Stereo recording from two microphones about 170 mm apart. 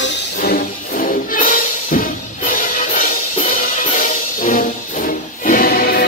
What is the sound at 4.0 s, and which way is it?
Music, 55° left (ahead or behind).